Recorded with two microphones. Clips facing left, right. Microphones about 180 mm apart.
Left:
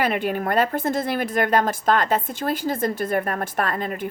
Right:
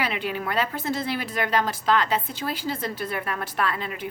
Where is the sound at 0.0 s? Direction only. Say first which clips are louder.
Left 5 dB; 50° left (ahead or behind).